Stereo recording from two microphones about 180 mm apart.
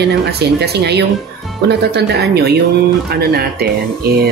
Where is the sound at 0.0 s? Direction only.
65° right (ahead or behind).